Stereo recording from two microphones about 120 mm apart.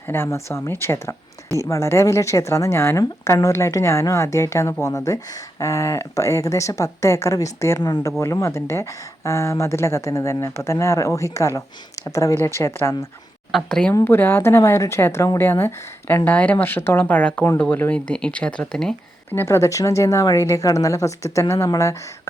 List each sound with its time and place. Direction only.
0.1 s a woman's voice: 20° left (ahead or behind)
8.2 s a woman's voice: 25° left (ahead or behind)
13.5 s speech: 5° left (ahead or behind)
13.9 s a woman's voice: 20° left (ahead or behind)
19.3 s a woman's voice: 20° left (ahead or behind)